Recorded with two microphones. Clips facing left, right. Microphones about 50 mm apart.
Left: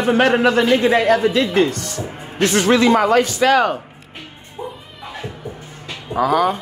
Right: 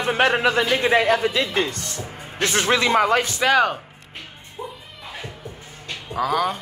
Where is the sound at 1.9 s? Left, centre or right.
Left.